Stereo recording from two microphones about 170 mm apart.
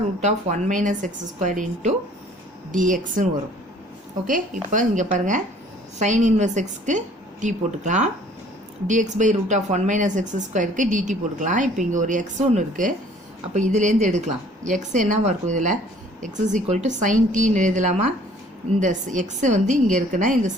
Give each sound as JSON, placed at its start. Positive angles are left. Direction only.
{"t": 0.2, "sound": "a woman's voice", "side_deg": -45}
{"t": 4.3, "sound": "a woman's voice", "side_deg": -50}